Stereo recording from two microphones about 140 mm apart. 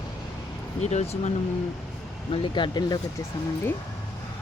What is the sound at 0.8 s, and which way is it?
Speech, 50° left (ahead or behind).